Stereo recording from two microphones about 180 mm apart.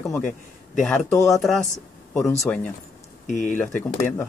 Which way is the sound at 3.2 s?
45° left (ahead or behind).